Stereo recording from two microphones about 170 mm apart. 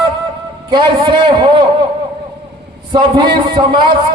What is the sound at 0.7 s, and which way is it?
Speech, 25° right (ahead or behind).